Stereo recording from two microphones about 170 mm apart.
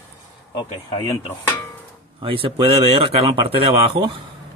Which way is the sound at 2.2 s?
30° right (ahead or behind).